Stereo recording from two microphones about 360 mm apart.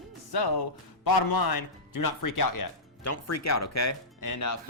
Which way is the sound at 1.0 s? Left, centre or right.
Left.